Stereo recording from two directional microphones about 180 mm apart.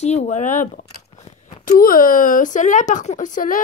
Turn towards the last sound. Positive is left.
turn(degrees=45)  # may be behind; listen again after turning